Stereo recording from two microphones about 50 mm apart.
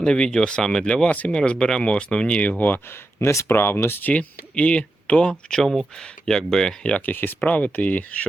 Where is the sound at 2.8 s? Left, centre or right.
Left.